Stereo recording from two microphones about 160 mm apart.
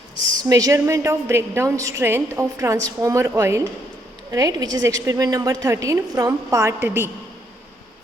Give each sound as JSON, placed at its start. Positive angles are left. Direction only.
{"t": 0.3, "sound": "a woman's voice", "side_deg": -20}